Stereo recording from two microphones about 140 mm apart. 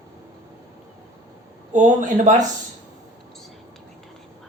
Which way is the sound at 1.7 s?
60° right (ahead or behind).